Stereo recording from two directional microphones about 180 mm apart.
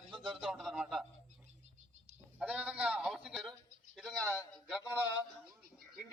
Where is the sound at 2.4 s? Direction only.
5° right (ahead or behind).